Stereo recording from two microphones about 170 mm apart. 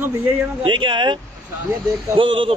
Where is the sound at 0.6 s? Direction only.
30° right (ahead or behind).